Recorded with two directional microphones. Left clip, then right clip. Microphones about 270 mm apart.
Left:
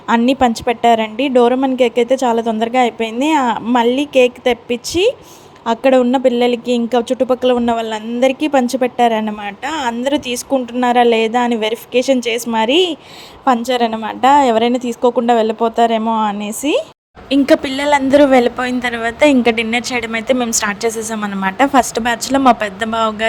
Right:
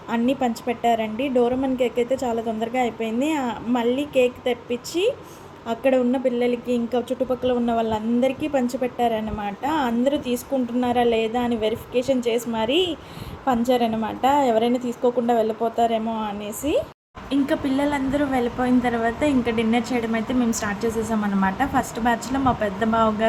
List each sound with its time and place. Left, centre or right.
0.1 s a woman's voice: left